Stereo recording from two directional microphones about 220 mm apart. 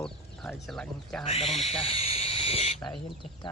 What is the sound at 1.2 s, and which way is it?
Speech, 30° left (ahead or behind).